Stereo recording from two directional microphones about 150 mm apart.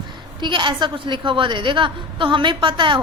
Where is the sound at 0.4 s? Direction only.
30° right (ahead or behind).